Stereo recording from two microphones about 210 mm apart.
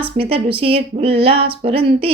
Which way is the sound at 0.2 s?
25° right (ahead or behind).